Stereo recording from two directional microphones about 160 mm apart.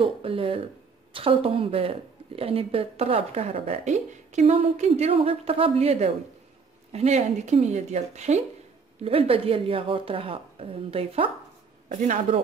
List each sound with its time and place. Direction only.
0.0 s speech: 35° right (ahead or behind)